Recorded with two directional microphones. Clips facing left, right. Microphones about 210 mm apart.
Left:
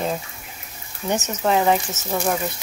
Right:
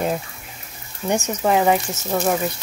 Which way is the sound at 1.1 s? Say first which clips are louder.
Right 2 dB; 10° right (ahead or behind).